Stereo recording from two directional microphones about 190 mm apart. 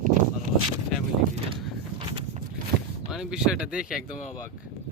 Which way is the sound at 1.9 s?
30° right (ahead or behind).